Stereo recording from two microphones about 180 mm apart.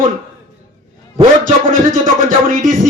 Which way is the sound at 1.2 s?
45° right (ahead or behind).